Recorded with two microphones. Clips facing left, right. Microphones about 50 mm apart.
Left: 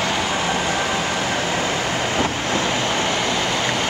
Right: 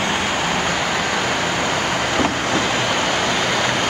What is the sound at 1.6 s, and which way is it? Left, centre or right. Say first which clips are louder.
Vehicle: right 2 dB; right.